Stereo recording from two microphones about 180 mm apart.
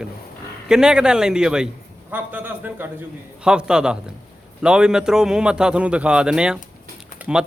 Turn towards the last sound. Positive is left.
turn(degrees=-5)  # may be behind; listen again after turning